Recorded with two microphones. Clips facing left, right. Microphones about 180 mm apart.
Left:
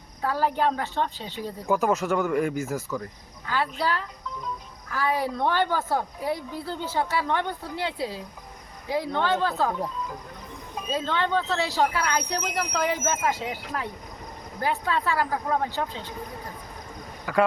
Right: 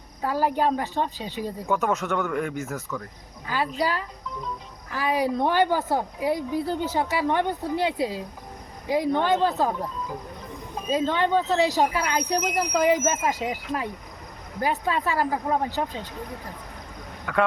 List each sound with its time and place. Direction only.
0.2 s a woman's voice: 10° right (ahead or behind)
1.6 s speech: centre (ahead or behind)
3.4 s a woman's voice: 15° right (ahead or behind)
10.8 s a woman's voice: 15° right (ahead or behind)
17.3 s speech: 5° left (ahead or behind)